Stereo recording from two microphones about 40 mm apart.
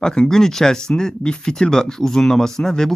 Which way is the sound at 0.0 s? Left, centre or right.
Centre.